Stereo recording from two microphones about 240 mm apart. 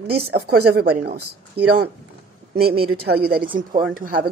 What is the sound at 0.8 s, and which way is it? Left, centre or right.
Speech, right.